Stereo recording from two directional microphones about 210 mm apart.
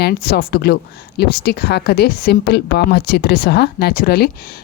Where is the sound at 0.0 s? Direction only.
45° left (ahead or behind).